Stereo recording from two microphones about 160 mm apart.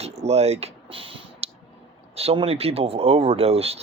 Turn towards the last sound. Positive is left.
turn(degrees=-40)  # may be behind; listen again after turning